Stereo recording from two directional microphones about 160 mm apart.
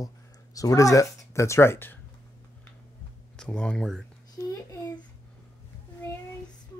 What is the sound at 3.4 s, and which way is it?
Speech, 5° left (ahead or behind).